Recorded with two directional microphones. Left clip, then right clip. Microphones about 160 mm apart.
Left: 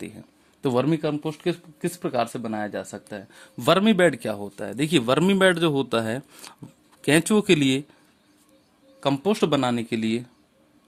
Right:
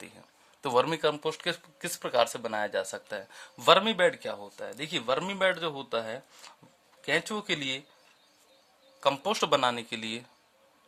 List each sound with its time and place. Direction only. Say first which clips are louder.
0.0 s speech: left 9 dB; 10° left (ahead or behind); by 1.9 s 15° right (ahead or behind)
1.9 s speech: left 1 dB; centre (ahead or behind)
3.6 s speech: left 3 dB; 25° left (ahead or behind); by 7.8 s 40° left (ahead or behind)
9.0 s speech: left 4 dB; 15° left (ahead or behind)